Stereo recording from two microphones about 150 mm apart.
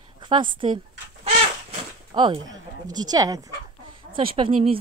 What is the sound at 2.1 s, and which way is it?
A woman's voice, 30° right (ahead or behind).